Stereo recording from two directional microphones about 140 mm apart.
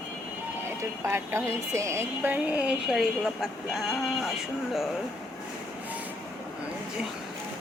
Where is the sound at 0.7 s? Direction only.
20° right (ahead or behind); by 4.1 s centre (ahead or behind).